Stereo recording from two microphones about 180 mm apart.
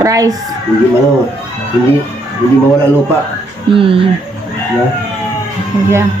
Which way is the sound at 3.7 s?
30° right (ahead or behind).